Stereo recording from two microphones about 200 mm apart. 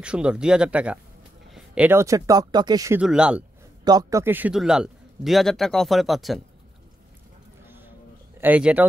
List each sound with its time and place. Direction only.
0.0 s a man's voice: 5° right (ahead or behind)
3.0 s a man's voice: 5° right (ahead or behind)
3.8 s a man's voice: 15° right (ahead or behind); by 6.4 s centre (ahead or behind)
7.6 s a sound: 10° right (ahead or behind)
8.4 s speech: 5° right (ahead or behind)